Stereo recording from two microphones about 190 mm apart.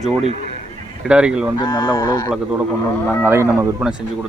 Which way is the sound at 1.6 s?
20° left (ahead or behind).